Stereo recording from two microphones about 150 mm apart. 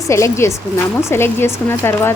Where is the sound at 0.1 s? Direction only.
20° left (ahead or behind).